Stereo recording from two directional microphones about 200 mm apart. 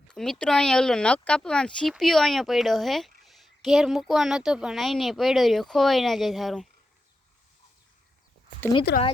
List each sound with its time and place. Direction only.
0.1 s speech: 5° left (ahead or behind)
8.9 s speech: 55° left (ahead or behind)